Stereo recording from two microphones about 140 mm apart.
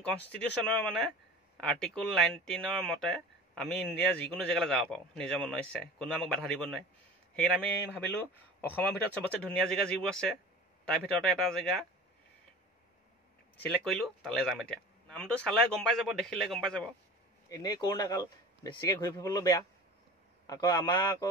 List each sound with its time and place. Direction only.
0.3 s speech: 10° left (ahead or behind)
13.6 s speech: 5° left (ahead or behind)
17.5 s a man's voice: 30° left (ahead or behind)